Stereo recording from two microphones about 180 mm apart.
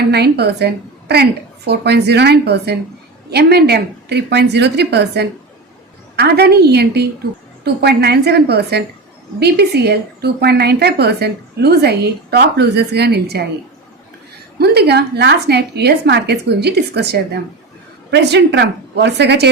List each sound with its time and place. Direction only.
0.0 s a woman's voice: 65° right (ahead or behind)
14.6 s a woman's voice: 65° right (ahead or behind)